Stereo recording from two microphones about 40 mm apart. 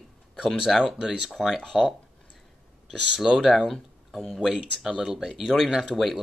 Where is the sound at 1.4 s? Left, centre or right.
Centre.